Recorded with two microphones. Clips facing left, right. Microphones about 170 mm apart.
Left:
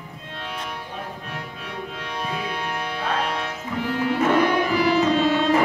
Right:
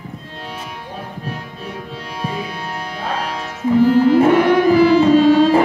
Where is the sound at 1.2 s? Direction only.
35° right (ahead or behind).